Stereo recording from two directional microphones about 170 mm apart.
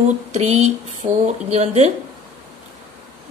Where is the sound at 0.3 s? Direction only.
40° right (ahead or behind).